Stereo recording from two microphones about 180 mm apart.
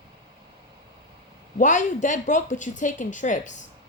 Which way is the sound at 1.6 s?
45° left (ahead or behind).